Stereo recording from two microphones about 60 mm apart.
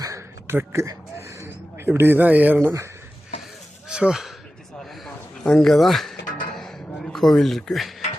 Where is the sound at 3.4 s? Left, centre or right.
Centre.